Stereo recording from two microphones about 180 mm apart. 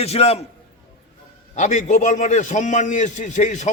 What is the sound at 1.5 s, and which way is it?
A man's voice, 45° left (ahead or behind).